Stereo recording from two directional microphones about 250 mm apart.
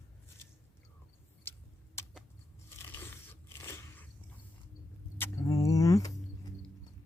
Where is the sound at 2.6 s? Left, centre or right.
Centre.